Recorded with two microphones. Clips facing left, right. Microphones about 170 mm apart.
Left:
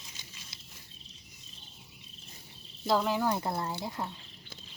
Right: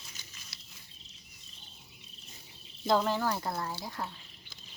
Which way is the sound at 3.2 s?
20° left (ahead or behind).